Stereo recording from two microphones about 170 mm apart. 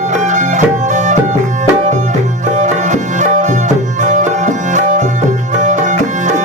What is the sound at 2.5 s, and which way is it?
Music, 45° right (ahead or behind).